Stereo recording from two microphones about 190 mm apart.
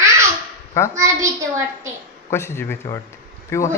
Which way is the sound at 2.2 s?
15° left (ahead or behind).